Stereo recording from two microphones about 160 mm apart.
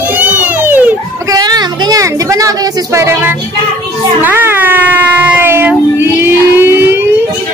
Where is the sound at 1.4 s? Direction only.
25° right (ahead or behind).